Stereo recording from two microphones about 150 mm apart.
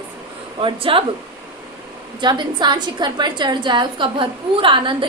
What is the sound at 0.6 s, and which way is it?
Speech, 35° right (ahead or behind).